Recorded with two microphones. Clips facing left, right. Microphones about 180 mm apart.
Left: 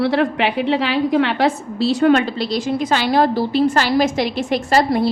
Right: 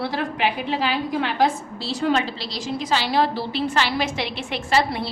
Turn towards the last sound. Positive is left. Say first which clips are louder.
# left 6 dB
turn(degrees=40)  # may be behind; listen again after turning